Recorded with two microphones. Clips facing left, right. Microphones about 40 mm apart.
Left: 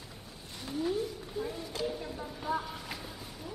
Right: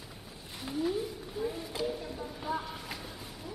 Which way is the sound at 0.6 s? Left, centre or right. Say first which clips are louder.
Even; centre.